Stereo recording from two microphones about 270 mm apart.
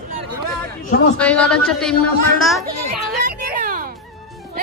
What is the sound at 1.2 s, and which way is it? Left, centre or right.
Speech, centre.